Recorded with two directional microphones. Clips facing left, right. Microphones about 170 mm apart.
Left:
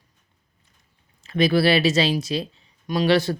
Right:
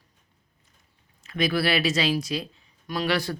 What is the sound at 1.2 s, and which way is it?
Speech, 30° left (ahead or behind).